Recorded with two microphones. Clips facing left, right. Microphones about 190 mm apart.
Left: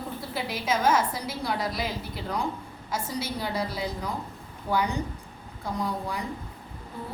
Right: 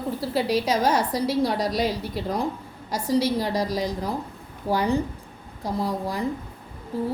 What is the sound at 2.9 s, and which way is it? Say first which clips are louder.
A woman's voice: right 9 dB; 35° right (ahead or behind).